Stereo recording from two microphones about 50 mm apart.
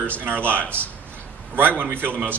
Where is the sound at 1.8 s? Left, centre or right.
Right.